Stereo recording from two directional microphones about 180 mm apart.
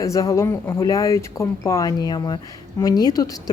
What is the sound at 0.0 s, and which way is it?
Speech, 20° left (ahead or behind).